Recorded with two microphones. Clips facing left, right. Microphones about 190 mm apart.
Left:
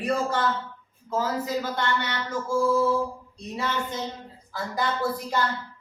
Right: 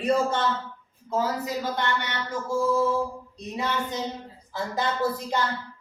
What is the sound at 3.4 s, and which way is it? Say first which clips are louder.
Speech: right 1 dB; 20° right (ahead or behind).